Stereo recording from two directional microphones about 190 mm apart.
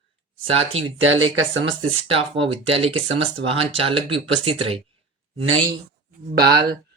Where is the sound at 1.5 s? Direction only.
80° right.